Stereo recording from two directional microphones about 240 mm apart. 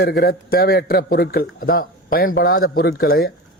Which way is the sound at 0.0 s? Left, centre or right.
Left.